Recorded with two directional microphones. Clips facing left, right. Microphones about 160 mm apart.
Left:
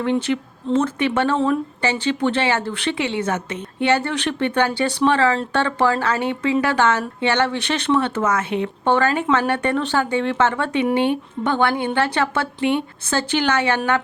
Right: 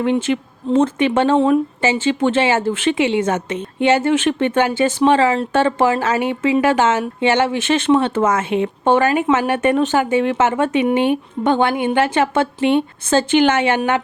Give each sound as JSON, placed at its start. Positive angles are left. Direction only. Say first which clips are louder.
{"t": 0.0, "sound": "a woman's voice", "louder": "right 3 dB", "side_deg": -15}
{"t": 10.7, "sound": "speech", "louder": "right 3 dB", "side_deg": -5}
{"t": 10.9, "sound": "a woman's voice", "louder": "right 3 dB", "side_deg": -15}